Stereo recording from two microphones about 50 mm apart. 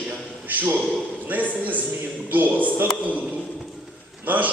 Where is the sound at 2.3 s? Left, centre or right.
Right.